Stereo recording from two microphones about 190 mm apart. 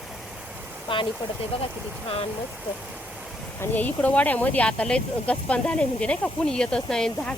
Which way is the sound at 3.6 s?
10° left (ahead or behind).